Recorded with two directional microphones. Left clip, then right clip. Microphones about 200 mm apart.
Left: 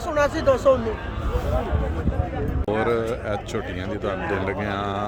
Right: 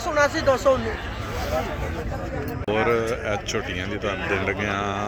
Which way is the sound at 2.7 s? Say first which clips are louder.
Right 1 dB; 5° left (ahead or behind).